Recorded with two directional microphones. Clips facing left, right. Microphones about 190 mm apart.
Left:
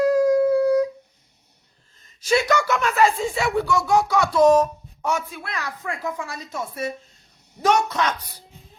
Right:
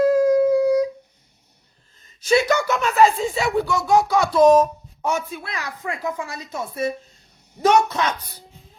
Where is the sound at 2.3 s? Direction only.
25° right (ahead or behind).